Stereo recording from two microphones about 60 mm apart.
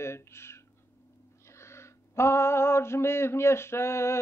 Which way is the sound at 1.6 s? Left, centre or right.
Left.